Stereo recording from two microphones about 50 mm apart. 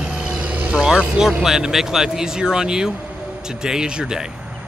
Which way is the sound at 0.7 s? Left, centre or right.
Centre.